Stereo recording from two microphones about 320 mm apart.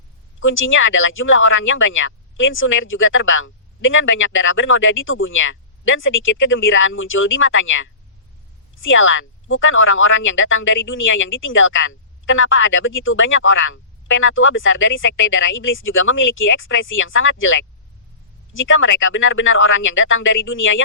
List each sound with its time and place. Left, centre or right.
0.3 s speech: left